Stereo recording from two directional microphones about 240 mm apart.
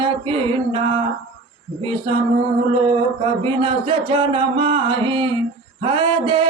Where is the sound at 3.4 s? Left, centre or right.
Right.